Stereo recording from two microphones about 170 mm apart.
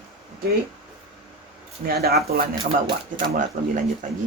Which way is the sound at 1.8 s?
65° right (ahead or behind).